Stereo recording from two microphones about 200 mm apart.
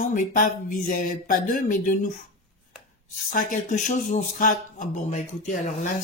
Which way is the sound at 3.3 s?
40° left (ahead or behind).